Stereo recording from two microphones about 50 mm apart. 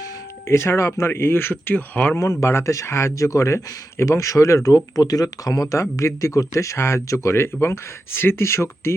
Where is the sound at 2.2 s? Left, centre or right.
Left.